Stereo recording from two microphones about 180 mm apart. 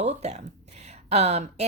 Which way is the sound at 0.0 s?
40° right (ahead or behind).